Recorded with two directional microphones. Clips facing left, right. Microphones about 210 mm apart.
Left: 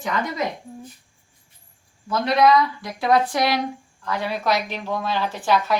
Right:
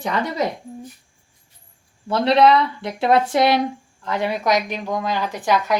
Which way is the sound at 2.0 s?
30° right (ahead or behind).